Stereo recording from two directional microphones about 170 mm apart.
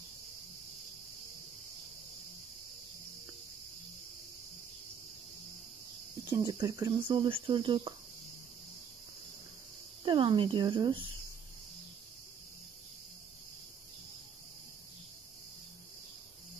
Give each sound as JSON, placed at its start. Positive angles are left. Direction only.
{"t": 6.3, "sound": "speech", "side_deg": -25}
{"t": 10.0, "sound": "speech", "side_deg": -30}